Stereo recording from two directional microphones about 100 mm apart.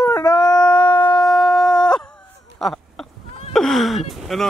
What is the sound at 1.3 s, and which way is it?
Shofar, centre (ahead or behind).